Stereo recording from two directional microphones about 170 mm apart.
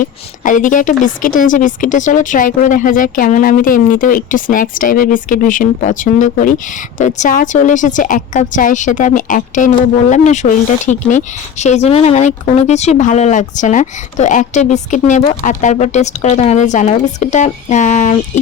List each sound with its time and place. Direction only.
0.0 s a woman's voice: 50° left (ahead or behind)